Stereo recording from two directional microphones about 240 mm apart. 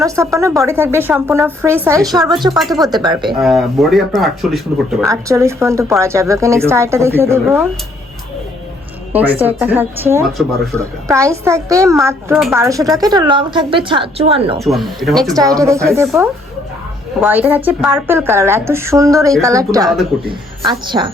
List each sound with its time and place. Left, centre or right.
0.3 s a woman's voice: centre
2.6 s speech: centre
2.8 s a woman's voice: centre
3.2 s speech: centre
5.0 s a woman's voice: centre
9.1 s a woman's voice: centre
12.3 s speech: centre
12.5 s a woman's voice: centre
14.6 s speech: centre
15.4 s a woman's voice: centre
16.0 s a woman's voice: centre